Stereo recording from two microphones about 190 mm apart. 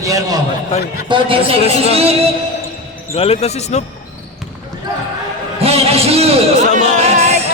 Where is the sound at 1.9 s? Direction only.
30° right (ahead or behind).